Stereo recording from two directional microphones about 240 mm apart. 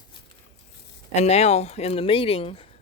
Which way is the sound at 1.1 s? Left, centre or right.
Left.